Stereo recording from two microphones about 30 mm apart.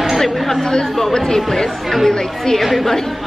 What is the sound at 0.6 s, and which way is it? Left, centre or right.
Speech, left.